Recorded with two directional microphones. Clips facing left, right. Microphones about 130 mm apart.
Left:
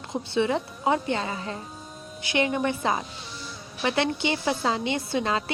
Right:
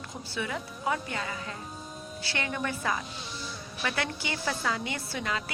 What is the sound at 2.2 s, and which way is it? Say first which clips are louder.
A woman's voice: left 9 dB; 20° left (ahead or behind).